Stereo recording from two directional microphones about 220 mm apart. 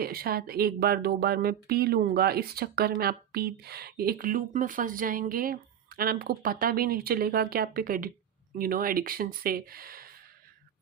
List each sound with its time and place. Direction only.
0.0 s speech: 45° right (ahead or behind)